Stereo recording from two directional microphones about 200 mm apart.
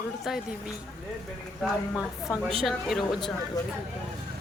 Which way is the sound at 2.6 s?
Centre (ahead or behind).